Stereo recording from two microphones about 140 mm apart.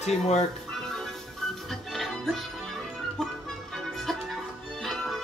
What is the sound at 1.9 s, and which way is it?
Music, centre (ahead or behind).